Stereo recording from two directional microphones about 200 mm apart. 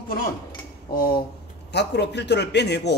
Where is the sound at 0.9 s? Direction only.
50° left (ahead or behind).